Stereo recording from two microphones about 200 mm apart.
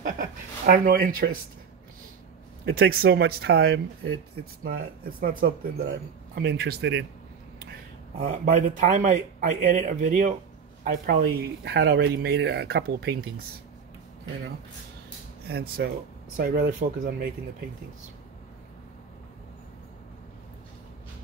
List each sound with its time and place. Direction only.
0.2 s speech: 45° right (ahead or behind)
2.6 s speech: 50° right (ahead or behind)
5.2 s speech: 45° right (ahead or behind)
8.2 s speech: 45° right (ahead or behind)
15.8 s speech: 55° right (ahead or behind)